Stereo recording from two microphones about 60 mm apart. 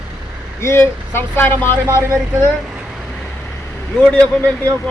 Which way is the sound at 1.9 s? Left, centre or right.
Right.